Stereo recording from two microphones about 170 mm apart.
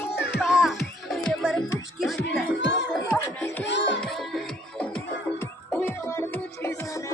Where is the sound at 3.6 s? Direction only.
90° left.